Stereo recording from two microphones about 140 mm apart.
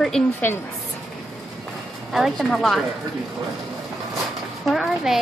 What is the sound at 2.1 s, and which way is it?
Speech, centre (ahead or behind).